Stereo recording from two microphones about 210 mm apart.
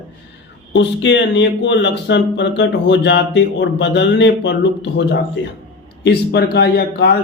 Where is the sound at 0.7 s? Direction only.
55° left (ahead or behind).